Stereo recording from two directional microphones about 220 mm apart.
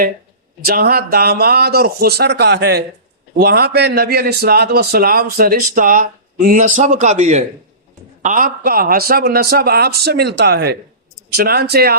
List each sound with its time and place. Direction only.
0.6 s a man's voice: 45° right (ahead or behind)